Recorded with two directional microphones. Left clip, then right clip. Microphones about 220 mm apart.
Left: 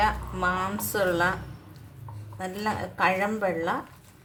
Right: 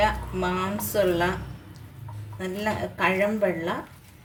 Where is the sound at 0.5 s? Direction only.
20° left (ahead or behind).